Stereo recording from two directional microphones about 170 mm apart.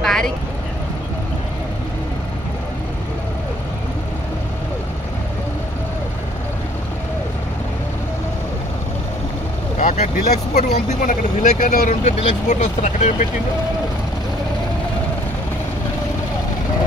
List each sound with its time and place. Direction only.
0.0 s vehicle: centre (ahead or behind)
9.8 s vehicle: 50° left (ahead or behind)
10.5 s speech: 40° left (ahead or behind)